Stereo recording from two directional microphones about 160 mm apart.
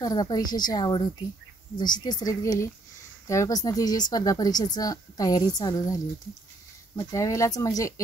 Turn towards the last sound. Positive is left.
turn(degrees=20)  # may be behind; listen again after turning